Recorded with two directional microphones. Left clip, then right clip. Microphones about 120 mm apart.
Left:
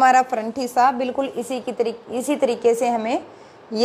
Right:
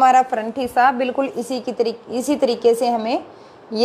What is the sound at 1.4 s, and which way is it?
A woman's voice, 30° right (ahead or behind).